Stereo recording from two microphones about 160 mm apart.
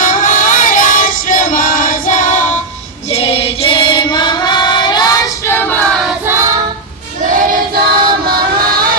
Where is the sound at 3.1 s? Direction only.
40° left (ahead or behind).